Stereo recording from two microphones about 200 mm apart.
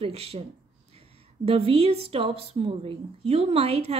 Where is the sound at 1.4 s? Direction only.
30° right (ahead or behind).